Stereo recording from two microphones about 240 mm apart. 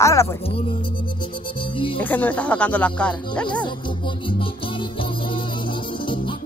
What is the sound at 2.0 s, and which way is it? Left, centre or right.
Speech, centre.